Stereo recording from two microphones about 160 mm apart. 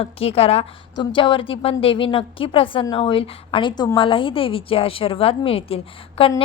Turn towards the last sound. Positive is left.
turn(degrees=35)  # may be behind; listen again after turning